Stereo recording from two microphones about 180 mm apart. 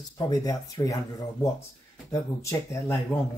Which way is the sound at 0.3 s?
20° left (ahead or behind).